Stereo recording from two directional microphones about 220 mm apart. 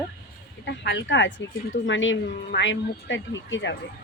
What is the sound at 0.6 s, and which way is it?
A woman's voice, 50° left (ahead or behind).